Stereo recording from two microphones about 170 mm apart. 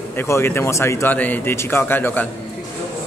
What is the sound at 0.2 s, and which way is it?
A man's voice, 15° left (ahead or behind).